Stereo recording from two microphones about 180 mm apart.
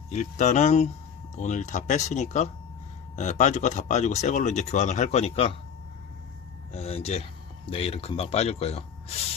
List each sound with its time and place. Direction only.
0.1 s speech: 40° left (ahead or behind)
6.7 s speech: 35° left (ahead or behind)